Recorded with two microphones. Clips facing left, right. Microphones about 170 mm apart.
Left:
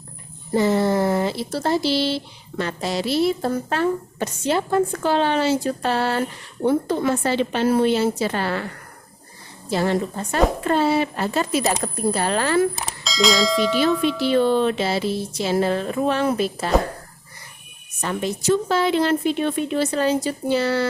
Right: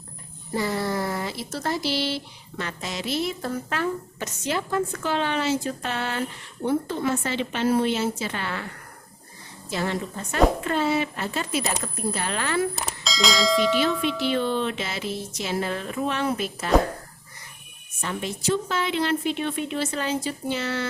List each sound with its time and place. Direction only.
0.5 s speech: 25° left (ahead or behind)
9.6 s speech: 35° left (ahead or behind)
12.7 s speech: centre (ahead or behind)
14.2 s speech: 35° left (ahead or behind)
18.1 s speech: 40° left (ahead or behind)